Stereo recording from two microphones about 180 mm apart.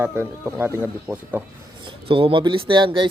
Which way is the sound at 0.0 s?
15° right (ahead or behind).